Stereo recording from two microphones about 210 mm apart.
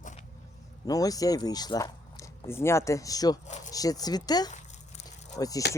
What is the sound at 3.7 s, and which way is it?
Speech, 15° left (ahead or behind).